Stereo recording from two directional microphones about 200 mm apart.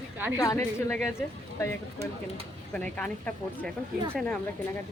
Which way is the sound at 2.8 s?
5° left (ahead or behind).